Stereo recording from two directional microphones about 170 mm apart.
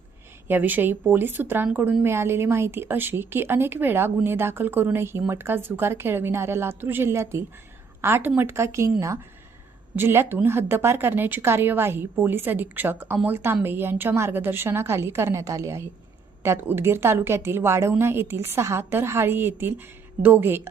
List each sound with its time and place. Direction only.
0.4 s speech: 10° right (ahead or behind)